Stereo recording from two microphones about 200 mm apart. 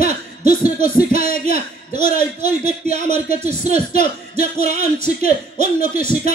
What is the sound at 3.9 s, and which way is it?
Speech, 45° left (ahead or behind).